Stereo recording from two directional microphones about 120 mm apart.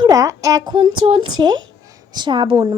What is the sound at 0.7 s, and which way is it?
A woman's voice, 45° right (ahead or behind).